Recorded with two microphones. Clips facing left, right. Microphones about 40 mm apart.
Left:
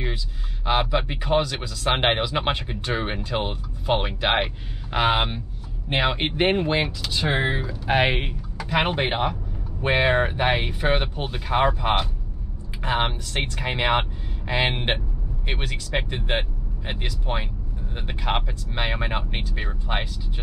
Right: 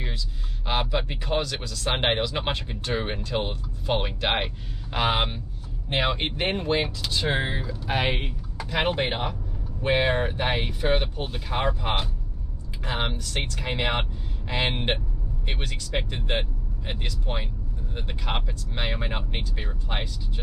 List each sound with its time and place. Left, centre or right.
0.7 s speech: centre
6.1 s speech: left
7.6 s speech: left